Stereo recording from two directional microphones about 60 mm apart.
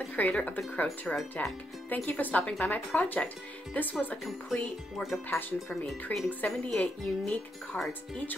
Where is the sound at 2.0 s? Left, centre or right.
Left.